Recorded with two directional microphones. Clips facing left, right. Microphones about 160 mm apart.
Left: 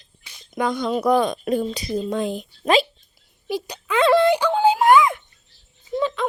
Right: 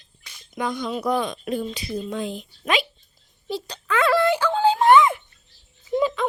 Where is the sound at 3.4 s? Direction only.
10° left (ahead or behind); by 6.2 s 10° right (ahead or behind).